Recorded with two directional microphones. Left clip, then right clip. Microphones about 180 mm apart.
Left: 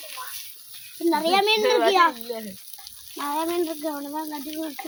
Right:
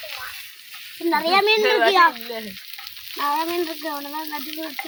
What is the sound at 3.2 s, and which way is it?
Speech, 25° left (ahead or behind).